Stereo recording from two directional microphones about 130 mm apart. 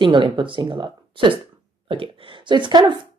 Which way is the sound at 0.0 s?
40° right (ahead or behind).